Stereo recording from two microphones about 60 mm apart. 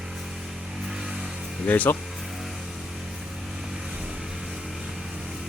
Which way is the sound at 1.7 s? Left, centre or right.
Left.